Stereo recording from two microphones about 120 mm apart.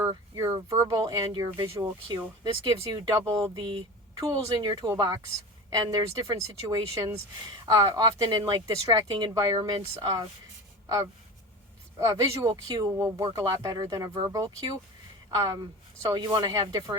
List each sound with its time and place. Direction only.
0.3 s speech: 30° right (ahead or behind)
3.5 s speech: 40° right (ahead or behind)
11.9 s speech: 30° right (ahead or behind)
12.9 s speech: 20° right (ahead or behind)
13.3 s speech: 30° right (ahead or behind)